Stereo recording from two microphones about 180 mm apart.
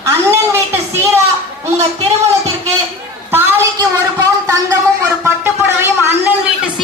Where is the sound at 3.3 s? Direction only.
15° right (ahead or behind).